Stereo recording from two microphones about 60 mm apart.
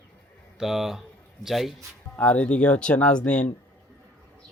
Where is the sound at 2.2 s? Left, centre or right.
Centre.